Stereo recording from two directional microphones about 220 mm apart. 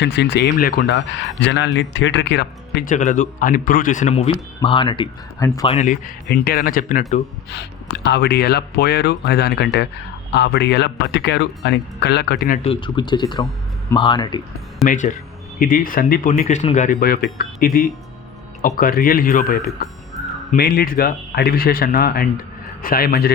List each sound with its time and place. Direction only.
0.0 s speech: 50° left (ahead or behind)
2.9 s speech: 35° left (ahead or behind)
4.6 s speech: 20° left (ahead or behind)
5.7 s speech: 35° left (ahead or behind)
6.2 s speech: 45° left (ahead or behind)
8.0 s speech: 50° left (ahead or behind)
12.6 s speech: 25° left (ahead or behind)
14.8 s speech: 35° left (ahead or behind)